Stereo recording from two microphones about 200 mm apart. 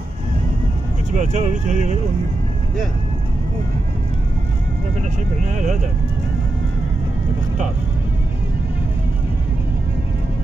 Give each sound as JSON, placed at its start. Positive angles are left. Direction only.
{"t": 1.1, "sound": "speech", "side_deg": -35}
{"t": 5.4, "sound": "speech", "side_deg": -35}